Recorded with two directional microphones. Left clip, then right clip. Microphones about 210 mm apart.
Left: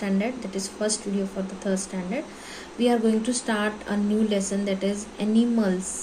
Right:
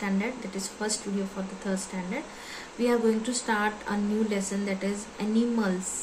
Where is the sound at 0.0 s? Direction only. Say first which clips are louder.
Left 3 dB; 10° right (ahead or behind).